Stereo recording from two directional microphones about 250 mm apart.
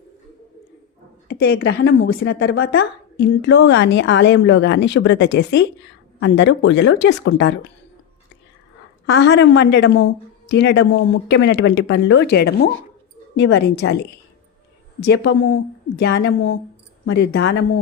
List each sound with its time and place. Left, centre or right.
1.3 s a woman's voice: left
9.0 s a woman's voice: left
15.0 s a woman's voice: left